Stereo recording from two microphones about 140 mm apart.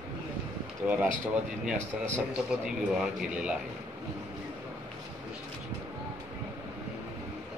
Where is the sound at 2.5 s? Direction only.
5° right (ahead or behind).